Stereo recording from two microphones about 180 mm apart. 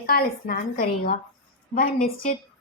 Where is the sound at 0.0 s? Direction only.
55° left (ahead or behind).